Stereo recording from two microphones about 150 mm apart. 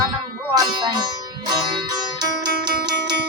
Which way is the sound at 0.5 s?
30° right (ahead or behind).